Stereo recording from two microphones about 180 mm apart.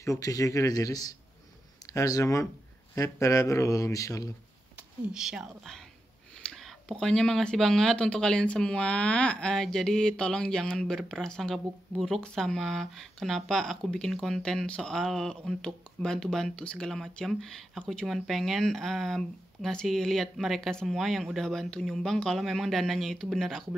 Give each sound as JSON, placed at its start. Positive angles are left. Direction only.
{"t": 0.0, "sound": "speech", "side_deg": 20}
{"t": 4.7, "sound": "speech", "side_deg": -5}